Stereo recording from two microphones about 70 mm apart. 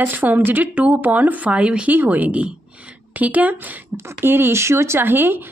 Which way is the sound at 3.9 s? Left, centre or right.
Right.